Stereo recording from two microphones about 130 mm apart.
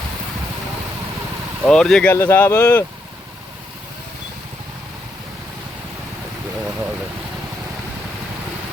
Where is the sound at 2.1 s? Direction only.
20° left (ahead or behind).